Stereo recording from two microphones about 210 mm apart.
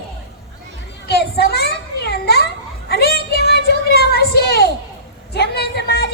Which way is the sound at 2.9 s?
50° left (ahead or behind).